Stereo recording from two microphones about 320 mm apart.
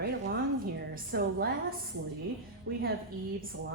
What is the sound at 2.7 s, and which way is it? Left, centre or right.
Speech, right.